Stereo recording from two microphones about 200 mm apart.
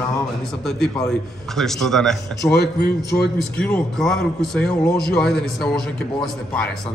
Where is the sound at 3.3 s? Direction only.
10° left (ahead or behind).